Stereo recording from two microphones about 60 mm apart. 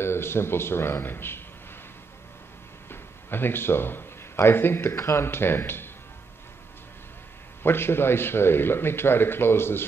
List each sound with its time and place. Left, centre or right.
0.0 s a man's voice: left
2.9 s a man's voice: left
7.6 s a man's voice: left